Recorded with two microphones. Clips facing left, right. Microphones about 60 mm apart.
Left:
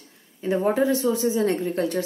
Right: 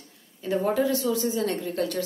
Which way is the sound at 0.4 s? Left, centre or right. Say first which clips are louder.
Left 3 dB; left.